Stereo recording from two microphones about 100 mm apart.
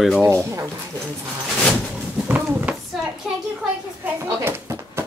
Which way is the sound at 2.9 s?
5° right (ahead or behind).